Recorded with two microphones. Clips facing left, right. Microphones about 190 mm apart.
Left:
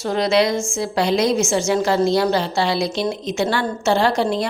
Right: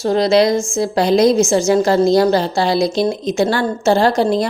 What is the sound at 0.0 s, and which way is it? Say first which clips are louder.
A woman's voice: right 5 dB; 35° right (ahead or behind).